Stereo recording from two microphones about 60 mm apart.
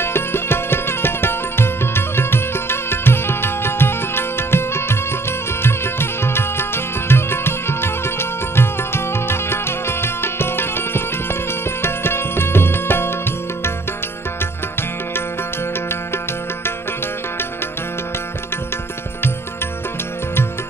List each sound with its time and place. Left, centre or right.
0.0 s music: left
14.4 s music: left